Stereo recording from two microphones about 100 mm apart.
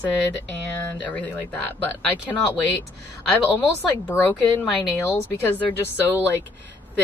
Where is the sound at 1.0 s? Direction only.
15° left (ahead or behind).